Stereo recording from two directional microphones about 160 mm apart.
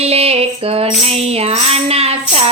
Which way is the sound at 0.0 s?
40° right (ahead or behind).